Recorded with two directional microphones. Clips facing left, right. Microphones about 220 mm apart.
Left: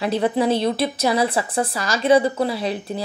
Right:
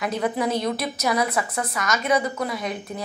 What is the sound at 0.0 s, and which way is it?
A woman's voice, 30° left (ahead or behind).